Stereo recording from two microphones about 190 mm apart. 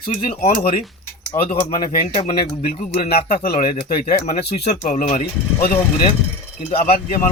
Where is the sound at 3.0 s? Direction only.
55° left (ahead or behind).